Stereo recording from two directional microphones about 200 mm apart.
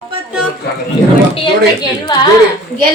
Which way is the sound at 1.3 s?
20° left (ahead or behind).